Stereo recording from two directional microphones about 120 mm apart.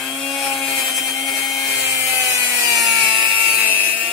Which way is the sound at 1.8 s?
20° right (ahead or behind).